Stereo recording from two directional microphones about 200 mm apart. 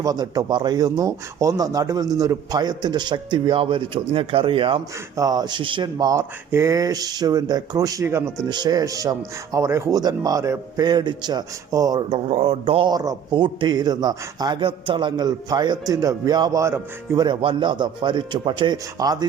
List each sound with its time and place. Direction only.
0.0 s speech: 20° right (ahead or behind)